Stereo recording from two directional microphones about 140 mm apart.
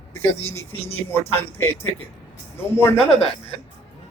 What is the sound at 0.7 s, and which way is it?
Speech, 45° left (ahead or behind).